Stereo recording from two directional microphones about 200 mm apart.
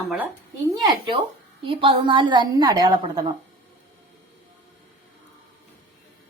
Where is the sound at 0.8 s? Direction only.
20° right (ahead or behind).